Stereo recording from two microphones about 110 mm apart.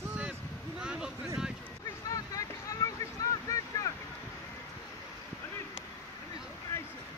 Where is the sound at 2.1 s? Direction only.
30° left (ahead or behind).